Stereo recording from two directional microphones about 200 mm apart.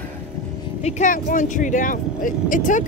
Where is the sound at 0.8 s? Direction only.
40° left (ahead or behind).